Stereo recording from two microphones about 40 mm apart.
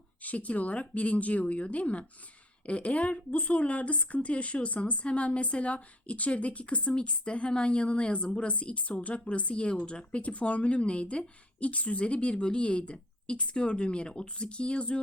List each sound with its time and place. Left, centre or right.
0.2 s speech: left